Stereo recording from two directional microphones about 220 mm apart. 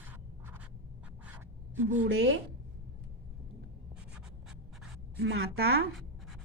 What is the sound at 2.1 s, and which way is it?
Speech, 50° right (ahead or behind).